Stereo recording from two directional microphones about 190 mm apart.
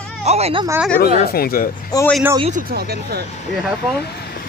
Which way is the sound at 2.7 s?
55° right (ahead or behind).